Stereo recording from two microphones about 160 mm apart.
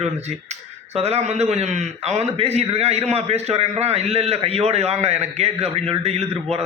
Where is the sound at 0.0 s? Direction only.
45° right (ahead or behind).